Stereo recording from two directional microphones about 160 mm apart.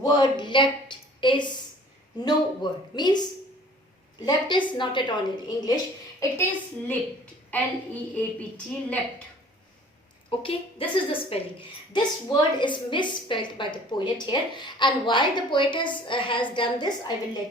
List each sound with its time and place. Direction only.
0.0 s a woman's voice: 25° left (ahead or behind)
4.3 s a woman's voice: 30° left (ahead or behind)
6.1 s a woman's voice: 15° left (ahead or behind)
8.1 s a woman's voice: 10° left (ahead or behind)
10.2 s a woman's voice: 35° left (ahead or behind)